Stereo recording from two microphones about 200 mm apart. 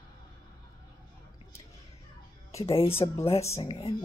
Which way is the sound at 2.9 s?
10° left (ahead or behind).